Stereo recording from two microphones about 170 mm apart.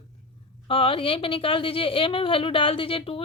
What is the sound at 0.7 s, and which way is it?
Speech, 30° left (ahead or behind).